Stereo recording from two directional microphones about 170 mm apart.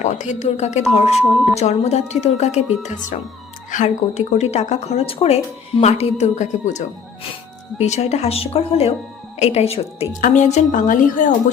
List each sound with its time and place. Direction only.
0.0 s a woman's voice: 45° left (ahead or behind)
10.2 s a woman's voice: 45° left (ahead or behind)